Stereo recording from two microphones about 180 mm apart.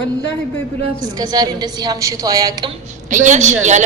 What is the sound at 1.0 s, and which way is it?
A woman's voice, 20° right (ahead or behind).